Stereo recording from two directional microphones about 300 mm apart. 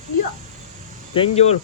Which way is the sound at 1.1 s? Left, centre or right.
Centre.